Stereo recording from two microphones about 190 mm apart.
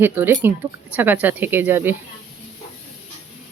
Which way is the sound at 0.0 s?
10° right (ahead or behind).